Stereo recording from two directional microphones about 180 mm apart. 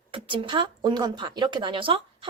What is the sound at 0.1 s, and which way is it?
Speech, 25° right (ahead or behind).